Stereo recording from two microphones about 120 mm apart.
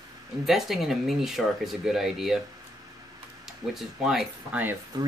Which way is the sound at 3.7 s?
5° right (ahead or behind).